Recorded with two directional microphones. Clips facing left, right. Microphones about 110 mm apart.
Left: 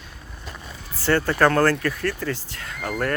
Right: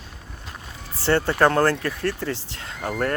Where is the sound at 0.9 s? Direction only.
25° right (ahead or behind).